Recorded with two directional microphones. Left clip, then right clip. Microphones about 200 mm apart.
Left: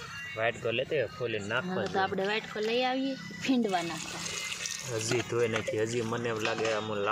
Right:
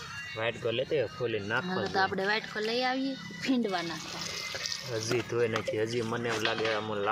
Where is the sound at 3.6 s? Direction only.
25° left (ahead or behind).